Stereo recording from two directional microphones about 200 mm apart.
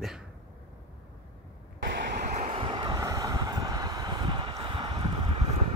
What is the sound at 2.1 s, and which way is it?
Vehicle, 35° right (ahead or behind).